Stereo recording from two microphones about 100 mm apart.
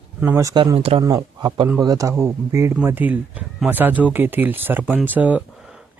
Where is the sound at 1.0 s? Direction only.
40° right (ahead or behind).